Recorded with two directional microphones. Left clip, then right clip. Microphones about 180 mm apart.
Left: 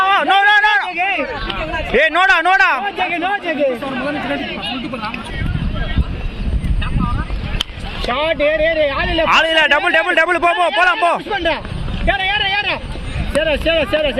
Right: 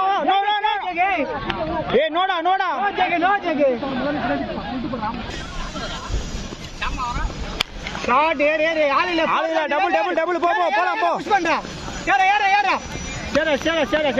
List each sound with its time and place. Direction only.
0.3 s a sound: centre (ahead or behind)
8.1 s speech: 15° right (ahead or behind)
9.2 s a man's voice: centre (ahead or behind)
11.3 s speech: 20° right (ahead or behind)
12.0 s a sound: 20° right (ahead or behind)
13.4 s speech: 15° right (ahead or behind)